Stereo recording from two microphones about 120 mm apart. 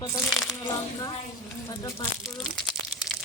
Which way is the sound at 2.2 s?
Centre (ahead or behind).